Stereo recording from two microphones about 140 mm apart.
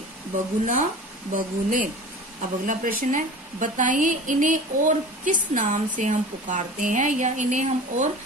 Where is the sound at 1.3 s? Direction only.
70° right (ahead or behind).